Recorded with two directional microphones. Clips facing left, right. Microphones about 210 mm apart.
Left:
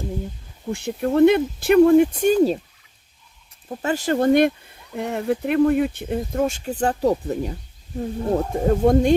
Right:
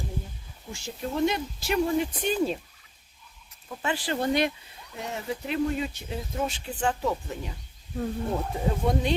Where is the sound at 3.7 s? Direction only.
40° left (ahead or behind).